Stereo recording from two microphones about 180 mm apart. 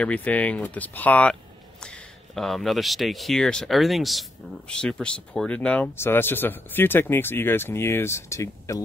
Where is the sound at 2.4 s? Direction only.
Centre (ahead or behind).